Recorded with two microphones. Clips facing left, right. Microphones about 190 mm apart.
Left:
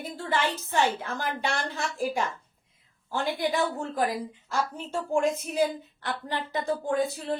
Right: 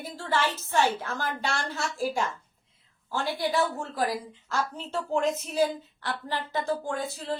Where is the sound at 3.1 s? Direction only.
15° left (ahead or behind).